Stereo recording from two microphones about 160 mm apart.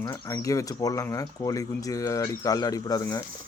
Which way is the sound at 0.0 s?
20° left (ahead or behind).